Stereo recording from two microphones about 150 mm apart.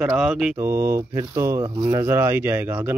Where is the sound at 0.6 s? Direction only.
15° right (ahead or behind).